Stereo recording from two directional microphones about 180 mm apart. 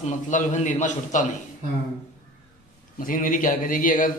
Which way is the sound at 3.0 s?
50° left (ahead or behind).